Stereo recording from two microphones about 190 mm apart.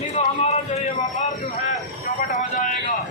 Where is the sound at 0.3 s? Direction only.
35° left (ahead or behind).